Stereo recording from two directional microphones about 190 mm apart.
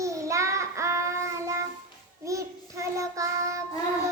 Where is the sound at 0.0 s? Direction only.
15° right (ahead or behind).